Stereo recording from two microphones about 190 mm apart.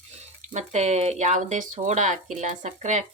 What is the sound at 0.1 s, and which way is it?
Speech, 35° right (ahead or behind).